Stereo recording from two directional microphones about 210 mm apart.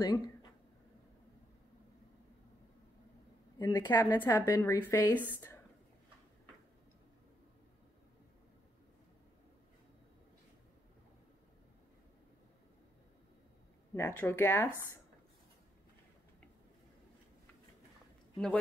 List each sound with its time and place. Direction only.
0.0 s speech: 20° left (ahead or behind)
3.5 s a woman's voice: 15° left (ahead or behind)
13.9 s a woman's voice: 10° left (ahead or behind)